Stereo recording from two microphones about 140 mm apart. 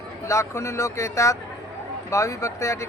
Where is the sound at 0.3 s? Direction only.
20° left (ahead or behind).